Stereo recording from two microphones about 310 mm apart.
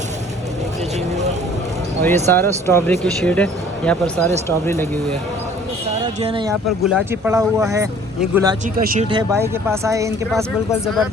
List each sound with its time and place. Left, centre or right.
2.2 s speech: centre
6.2 s speech: centre
6.8 s speech: centre
8.8 s speech: right
9.0 s speech: centre
10.3 s speech: centre